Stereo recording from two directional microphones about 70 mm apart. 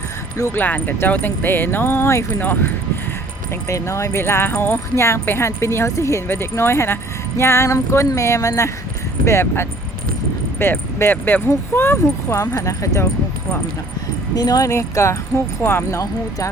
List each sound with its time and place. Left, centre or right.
0.5 s speech: left
2.4 s speech: left
3.7 s speech: left
14.3 s speech: left
14.7 s speech: left